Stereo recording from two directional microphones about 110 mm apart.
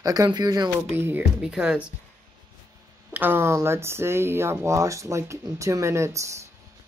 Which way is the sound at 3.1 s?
20° right (ahead or behind).